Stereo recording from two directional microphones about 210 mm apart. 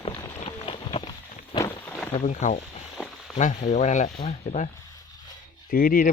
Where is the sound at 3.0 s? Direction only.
5° right (ahead or behind).